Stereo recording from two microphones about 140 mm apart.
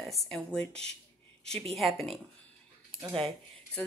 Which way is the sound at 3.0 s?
35° right (ahead or behind).